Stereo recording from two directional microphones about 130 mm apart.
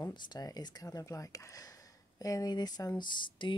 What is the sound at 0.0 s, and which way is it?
Speech, 30° left (ahead or behind).